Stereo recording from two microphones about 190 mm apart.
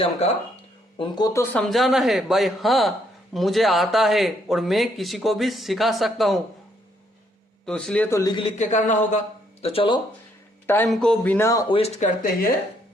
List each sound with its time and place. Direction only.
0.0 s a man's voice: 30° left (ahead or behind)
0.9 s speech: 20° left (ahead or behind)
1.6 s speech: centre (ahead or behind)
7.6 s speech: 5° left (ahead or behind)
8.2 s a man's voice: 25° left (ahead or behind)
10.8 s speech: 5° left (ahead or behind)
11.7 s a man's voice: 30° left (ahead or behind)
12.2 s speech: 50° left (ahead or behind)